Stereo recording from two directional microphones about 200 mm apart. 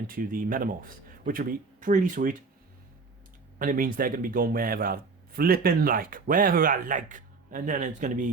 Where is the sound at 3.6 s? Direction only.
45° right (ahead or behind).